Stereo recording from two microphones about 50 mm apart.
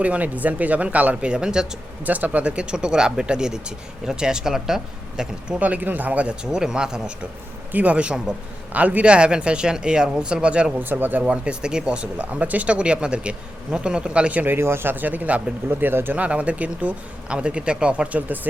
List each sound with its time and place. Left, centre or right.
0.0 s speech: right
2.0 s speech: right; by 5.5 s centre
5.5 s speech: right; by 7.1 s centre
7.7 s speech: right
8.7 s speech: right
10.8 s speech: right
11.2 s speech: centre
14.4 s speech: right
15.7 s speech: right
16.1 s speech: right